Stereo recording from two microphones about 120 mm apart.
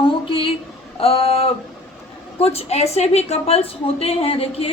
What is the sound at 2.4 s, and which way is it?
A woman's voice, 55° left (ahead or behind).